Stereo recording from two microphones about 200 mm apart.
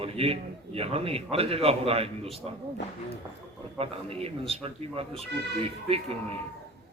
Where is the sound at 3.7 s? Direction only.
30° right (ahead or behind).